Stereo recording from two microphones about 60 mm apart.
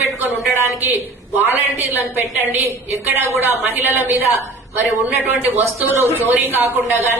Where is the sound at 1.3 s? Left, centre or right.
Right.